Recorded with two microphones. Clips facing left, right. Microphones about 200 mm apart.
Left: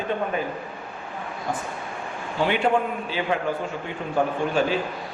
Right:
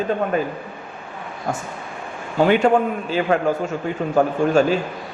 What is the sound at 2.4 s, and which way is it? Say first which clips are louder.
A man's voice: right 6 dB; 45° right (ahead or behind).